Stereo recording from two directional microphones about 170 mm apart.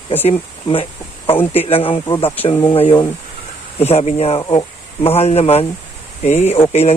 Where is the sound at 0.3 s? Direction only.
30° left (ahead or behind).